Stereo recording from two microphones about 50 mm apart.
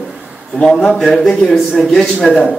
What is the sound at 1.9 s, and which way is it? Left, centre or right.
Speech, centre.